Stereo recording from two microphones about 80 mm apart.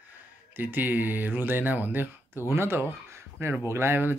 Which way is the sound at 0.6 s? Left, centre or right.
Right.